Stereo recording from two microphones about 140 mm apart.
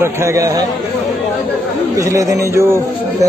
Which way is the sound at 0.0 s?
20° right (ahead or behind).